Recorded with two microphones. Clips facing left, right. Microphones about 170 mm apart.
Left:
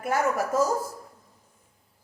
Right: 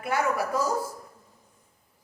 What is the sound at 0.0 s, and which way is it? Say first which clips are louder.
Speech: left 1 dB; 45° left (ahead or behind).